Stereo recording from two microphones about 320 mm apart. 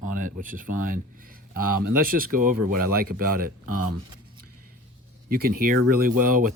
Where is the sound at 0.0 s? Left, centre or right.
Right.